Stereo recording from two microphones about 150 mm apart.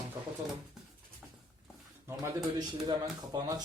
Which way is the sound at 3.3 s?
25° right (ahead or behind).